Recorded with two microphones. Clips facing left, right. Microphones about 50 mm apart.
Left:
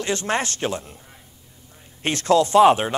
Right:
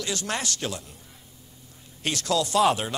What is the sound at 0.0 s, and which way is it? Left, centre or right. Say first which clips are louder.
Speech: left 6 dB; left.